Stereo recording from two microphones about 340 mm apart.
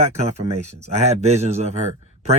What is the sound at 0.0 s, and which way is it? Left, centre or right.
Speech, centre.